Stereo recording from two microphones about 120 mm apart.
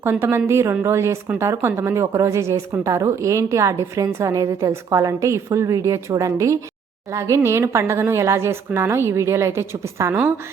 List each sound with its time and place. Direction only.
0.0 s a woman's voice: 20° right (ahead or behind)